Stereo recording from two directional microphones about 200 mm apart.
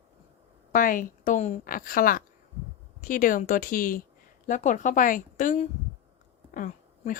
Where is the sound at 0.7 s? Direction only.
45° left (ahead or behind).